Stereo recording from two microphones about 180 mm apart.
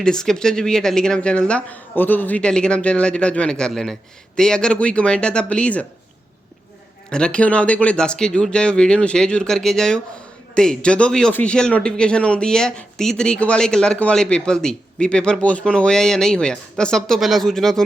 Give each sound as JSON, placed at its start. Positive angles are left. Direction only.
{"t": 0.0, "sound": "speech", "side_deg": 5}
{"t": 7.1, "sound": "speech", "side_deg": 5}